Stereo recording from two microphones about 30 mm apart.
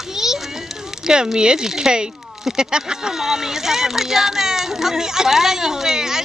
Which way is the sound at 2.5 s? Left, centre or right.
Centre.